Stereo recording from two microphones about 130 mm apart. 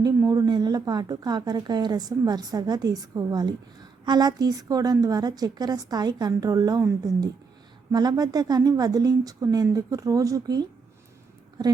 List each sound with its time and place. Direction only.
0.0 s a woman's voice: 30° right (ahead or behind)